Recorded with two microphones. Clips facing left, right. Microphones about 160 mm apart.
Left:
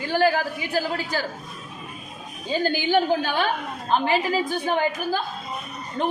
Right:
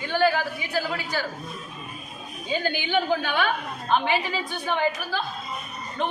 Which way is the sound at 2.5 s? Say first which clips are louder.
Left 4 dB; 40° left (ahead or behind).